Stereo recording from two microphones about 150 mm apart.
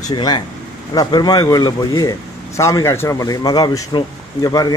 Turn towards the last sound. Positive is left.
turn(degrees=25)  # may be behind; listen again after turning